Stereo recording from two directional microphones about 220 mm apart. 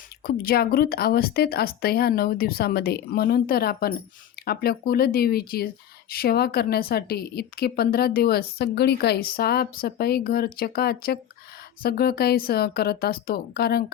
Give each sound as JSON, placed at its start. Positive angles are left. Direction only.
{"t": 0.2, "sound": "a woman's voice", "side_deg": 40}